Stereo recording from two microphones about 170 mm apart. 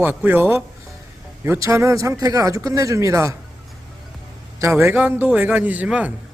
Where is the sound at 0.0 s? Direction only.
10° right (ahead or behind).